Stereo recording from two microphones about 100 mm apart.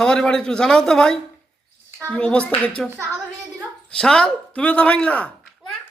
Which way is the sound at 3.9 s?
10° left (ahead or behind).